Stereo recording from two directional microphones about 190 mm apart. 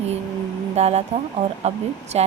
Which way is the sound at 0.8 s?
35° right (ahead or behind).